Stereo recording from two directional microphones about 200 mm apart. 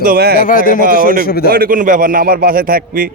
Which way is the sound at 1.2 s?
50° left (ahead or behind).